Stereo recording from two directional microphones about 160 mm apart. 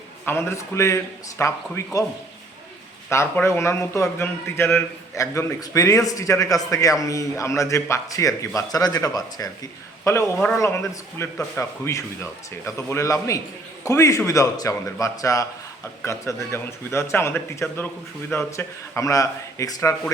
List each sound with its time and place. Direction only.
0.3 s a man's voice: 15° left (ahead or behind)
3.1 s a man's voice: 15° left (ahead or behind)